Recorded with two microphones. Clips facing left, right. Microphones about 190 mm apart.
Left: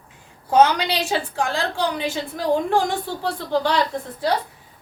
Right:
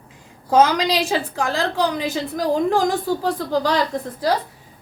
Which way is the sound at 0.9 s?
35° right (ahead or behind).